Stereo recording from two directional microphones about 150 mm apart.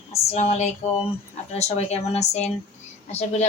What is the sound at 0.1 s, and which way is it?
A woman's voice, 45° left (ahead or behind).